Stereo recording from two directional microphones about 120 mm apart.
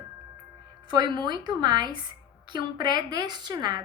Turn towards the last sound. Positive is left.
turn(degrees=-35)  # may be behind; listen again after turning